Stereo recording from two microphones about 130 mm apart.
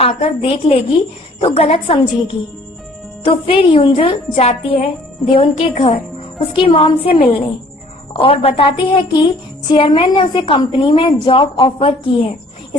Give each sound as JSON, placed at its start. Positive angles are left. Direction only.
{"t": 0.0, "sound": "a woman's voice", "side_deg": 45}